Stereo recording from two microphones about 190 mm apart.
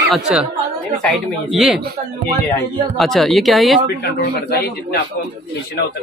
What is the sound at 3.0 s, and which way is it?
Speech, centre (ahead or behind).